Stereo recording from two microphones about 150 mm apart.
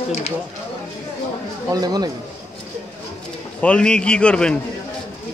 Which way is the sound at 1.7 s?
25° right (ahead or behind).